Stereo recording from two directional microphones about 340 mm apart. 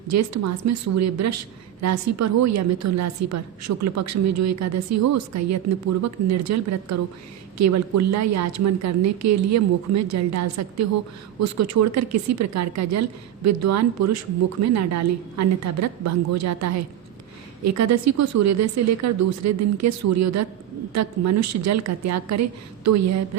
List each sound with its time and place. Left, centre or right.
0.1 s a woman's voice: right